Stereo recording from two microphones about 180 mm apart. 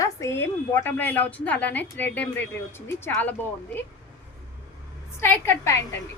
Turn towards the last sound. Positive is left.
turn(degrees=15)  # may be behind; listen again after turning